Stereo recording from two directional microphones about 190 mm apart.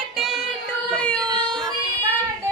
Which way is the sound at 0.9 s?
5° left (ahead or behind).